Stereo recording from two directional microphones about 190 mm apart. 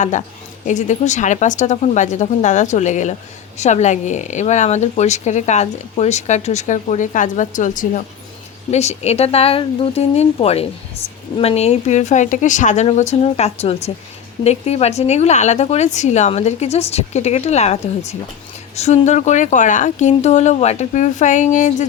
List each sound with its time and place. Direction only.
0.0 s a woman's voice: 40° left (ahead or behind)